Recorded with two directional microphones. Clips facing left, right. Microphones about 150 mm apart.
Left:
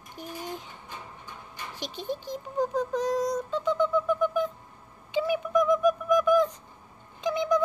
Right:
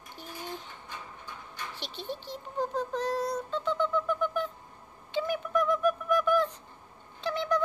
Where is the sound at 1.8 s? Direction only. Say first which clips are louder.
Left 6 dB; 40° left (ahead or behind).